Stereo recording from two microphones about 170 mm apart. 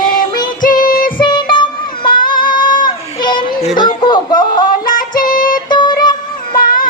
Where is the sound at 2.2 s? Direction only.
55° left (ahead or behind).